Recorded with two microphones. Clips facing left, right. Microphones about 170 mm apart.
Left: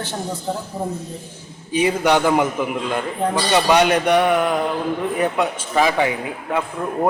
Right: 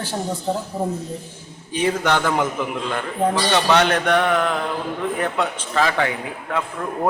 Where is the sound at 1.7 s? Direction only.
10° left (ahead or behind).